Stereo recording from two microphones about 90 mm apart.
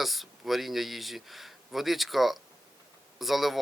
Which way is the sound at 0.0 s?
Centre (ahead or behind).